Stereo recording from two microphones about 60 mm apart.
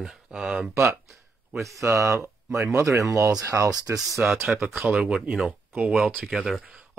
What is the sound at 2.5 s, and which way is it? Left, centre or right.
Speech, right.